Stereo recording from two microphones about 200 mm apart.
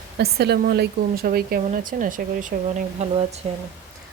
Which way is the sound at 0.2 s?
55° right (ahead or behind).